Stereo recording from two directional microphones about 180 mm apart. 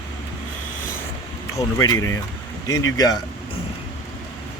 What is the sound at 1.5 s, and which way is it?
Speech, 15° left (ahead or behind).